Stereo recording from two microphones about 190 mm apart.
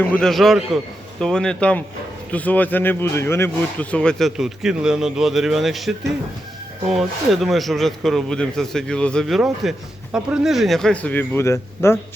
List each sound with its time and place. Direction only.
0.0 s speech: 5° left (ahead or behind)
6.9 s speech: centre (ahead or behind); by 11.9 s 15° left (ahead or behind)